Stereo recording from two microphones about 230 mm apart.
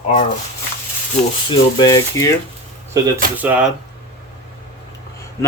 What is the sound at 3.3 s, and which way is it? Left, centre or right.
Speech, centre.